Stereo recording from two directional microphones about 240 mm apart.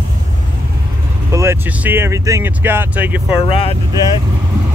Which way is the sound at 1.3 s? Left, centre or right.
Centre.